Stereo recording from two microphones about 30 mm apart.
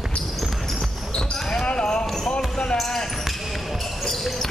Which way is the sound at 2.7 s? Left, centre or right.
Centre.